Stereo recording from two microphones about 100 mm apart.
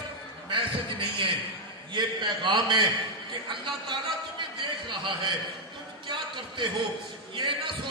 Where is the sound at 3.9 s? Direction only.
55° right (ahead or behind).